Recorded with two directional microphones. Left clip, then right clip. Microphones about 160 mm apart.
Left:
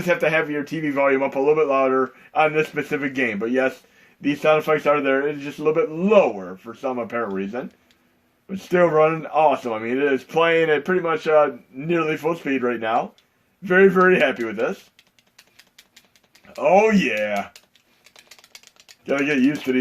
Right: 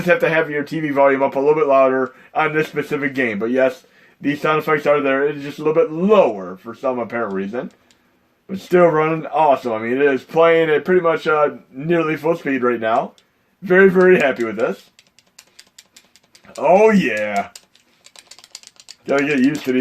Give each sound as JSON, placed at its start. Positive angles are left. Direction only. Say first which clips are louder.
{"t": 0.1, "sound": "speech", "louder": "right 4 dB", "side_deg": -40}
{"t": 15.4, "sound": "a sound", "louder": "right 5 dB", "side_deg": -60}
{"t": 16.5, "sound": "speech", "louder": "right 4 dB", "side_deg": -50}
{"t": 18.0, "sound": "typing", "louder": "right 5 dB", "side_deg": -60}